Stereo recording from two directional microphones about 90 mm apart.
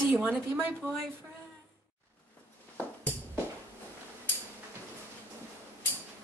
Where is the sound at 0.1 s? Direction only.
20° right (ahead or behind).